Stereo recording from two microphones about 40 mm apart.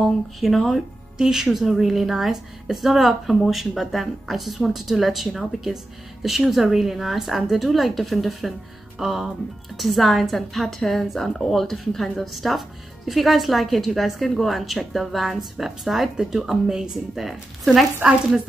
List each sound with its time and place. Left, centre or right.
0.0 s speech: centre
1.1 s speech: centre
8.9 s music: centre
9.8 s speech: centre
18.0 s speech: right